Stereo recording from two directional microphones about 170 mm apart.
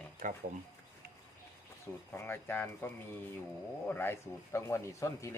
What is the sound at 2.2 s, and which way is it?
Speech, 15° left (ahead or behind).